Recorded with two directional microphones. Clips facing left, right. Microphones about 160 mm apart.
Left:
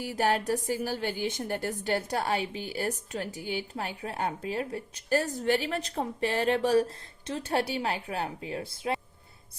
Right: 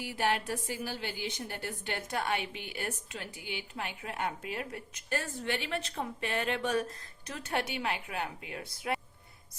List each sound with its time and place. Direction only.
0.0 s a woman's voice: 40° left (ahead or behind)